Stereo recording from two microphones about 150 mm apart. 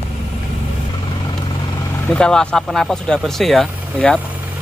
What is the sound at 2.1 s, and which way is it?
Speech, 5° left (ahead or behind).